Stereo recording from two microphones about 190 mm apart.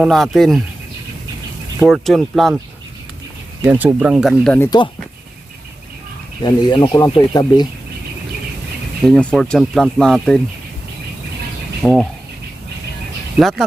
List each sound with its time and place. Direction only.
0.0 s speech: centre (ahead or behind)
1.8 s speech: centre (ahead or behind)
3.7 s speech: 10° right (ahead or behind)
6.4 s speech: 20° left (ahead or behind)
9.0 s speech: 5° left (ahead or behind)
11.8 s speech: centre (ahead or behind)
13.4 s speech: centre (ahead or behind)